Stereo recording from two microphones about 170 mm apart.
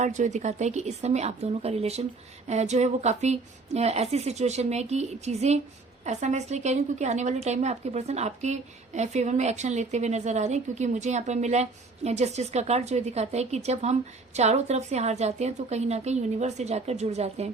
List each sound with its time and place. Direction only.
0.0 s a woman's voice: 45° right (ahead or behind)